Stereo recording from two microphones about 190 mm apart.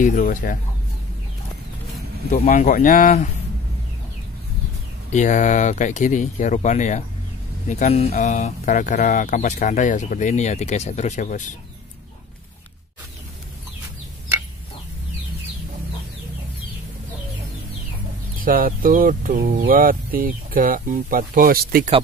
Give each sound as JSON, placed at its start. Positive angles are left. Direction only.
{"t": 0.0, "sound": "speech", "side_deg": 45}
{"t": 2.6, "sound": "speech", "side_deg": 45}
{"t": 5.1, "sound": "speech", "side_deg": 40}
{"t": 18.4, "sound": "speech", "side_deg": -50}